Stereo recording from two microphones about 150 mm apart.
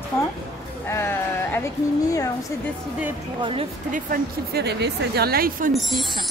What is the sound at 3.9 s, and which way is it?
Speech, 80° right.